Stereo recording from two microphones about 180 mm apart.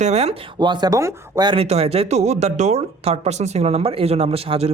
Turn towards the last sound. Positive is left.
turn(degrees=-35)  # may be behind; listen again after turning